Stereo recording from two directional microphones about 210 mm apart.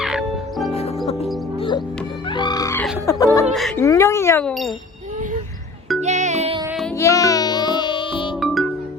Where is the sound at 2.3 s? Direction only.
20° left (ahead or behind).